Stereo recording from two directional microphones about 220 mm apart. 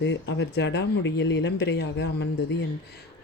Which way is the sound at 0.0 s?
50° left (ahead or behind).